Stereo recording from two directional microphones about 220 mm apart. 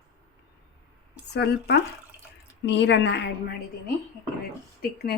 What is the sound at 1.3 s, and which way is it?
A woman's voice, 50° left (ahead or behind).